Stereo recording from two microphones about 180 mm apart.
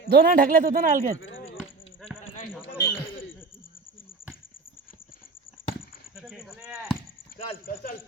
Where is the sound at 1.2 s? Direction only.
90° left.